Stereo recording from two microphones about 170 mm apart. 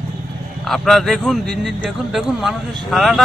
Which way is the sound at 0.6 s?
Centre (ahead or behind).